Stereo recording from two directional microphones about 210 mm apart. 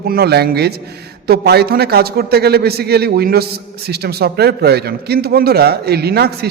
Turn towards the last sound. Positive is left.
turn(degrees=-50)  # may be behind; listen again after turning